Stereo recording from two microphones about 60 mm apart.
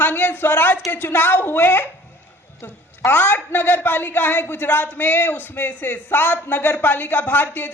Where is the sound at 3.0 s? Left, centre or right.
Left.